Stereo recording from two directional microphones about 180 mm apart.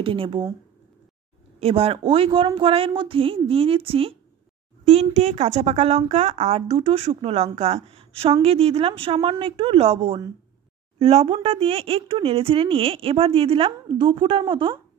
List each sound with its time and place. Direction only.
0.0 s speech: 30° right (ahead or behind)
1.6 s speech: 35° right (ahead or behind)